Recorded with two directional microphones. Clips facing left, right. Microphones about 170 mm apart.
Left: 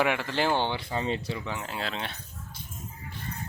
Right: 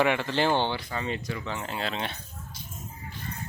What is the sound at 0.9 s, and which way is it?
Speech, 30° left (ahead or behind).